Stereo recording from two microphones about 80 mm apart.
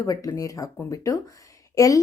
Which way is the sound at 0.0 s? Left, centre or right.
Left.